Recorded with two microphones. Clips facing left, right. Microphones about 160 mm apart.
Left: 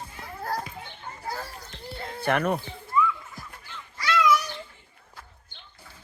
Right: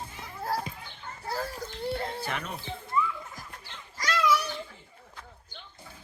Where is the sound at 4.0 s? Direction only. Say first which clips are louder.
Left 3 dB; 40° right (ahead or behind).